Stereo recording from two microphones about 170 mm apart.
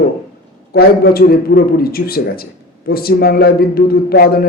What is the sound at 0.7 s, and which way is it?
A man's voice, 65° left (ahead or behind).